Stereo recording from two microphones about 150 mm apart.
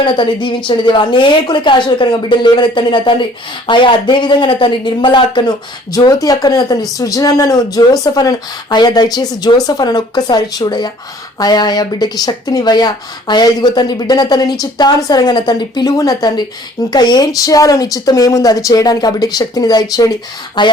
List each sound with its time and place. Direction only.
0.0 s a woman's voice: 35° left (ahead or behind)